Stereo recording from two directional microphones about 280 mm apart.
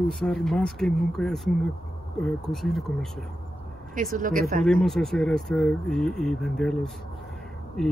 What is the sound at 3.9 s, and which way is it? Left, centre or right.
Speech, right.